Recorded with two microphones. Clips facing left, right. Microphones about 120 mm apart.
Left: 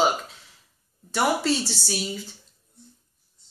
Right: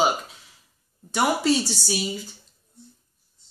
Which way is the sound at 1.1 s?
Centre (ahead or behind).